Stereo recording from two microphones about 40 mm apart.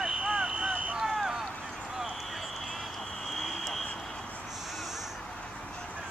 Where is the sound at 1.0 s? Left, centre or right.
Centre.